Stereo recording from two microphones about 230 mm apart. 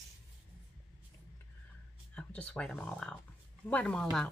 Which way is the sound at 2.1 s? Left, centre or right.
Centre.